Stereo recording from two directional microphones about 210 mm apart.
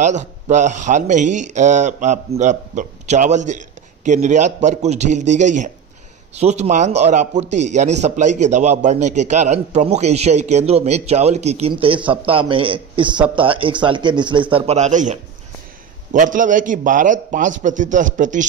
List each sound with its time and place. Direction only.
0.0 s a man's voice: 35° right (ahead or behind)